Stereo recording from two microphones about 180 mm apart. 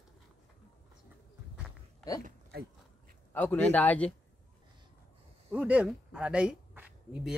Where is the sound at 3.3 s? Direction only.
10° left (ahead or behind).